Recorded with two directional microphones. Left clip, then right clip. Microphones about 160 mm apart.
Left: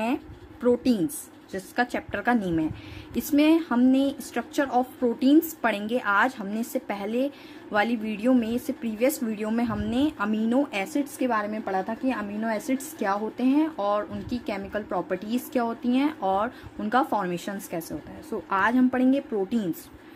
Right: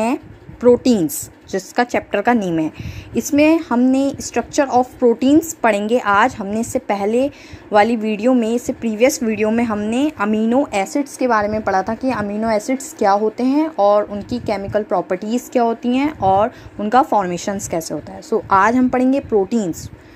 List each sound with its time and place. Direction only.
0.0 s a sound: 25° right (ahead or behind)
0.9 s a woman's voice: 35° right (ahead or behind)
11.1 s a woman's voice: centre (ahead or behind)
11.4 s a woman's voice: 25° right (ahead or behind)